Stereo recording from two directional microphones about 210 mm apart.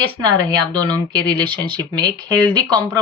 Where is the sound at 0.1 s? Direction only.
20° right (ahead or behind).